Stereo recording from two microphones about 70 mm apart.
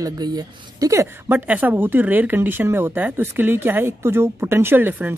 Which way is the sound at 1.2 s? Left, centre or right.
Right.